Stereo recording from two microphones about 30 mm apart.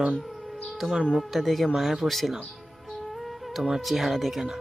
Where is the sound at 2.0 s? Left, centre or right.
Centre.